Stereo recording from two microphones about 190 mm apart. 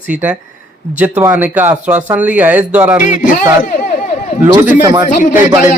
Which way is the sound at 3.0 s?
40° left (ahead or behind).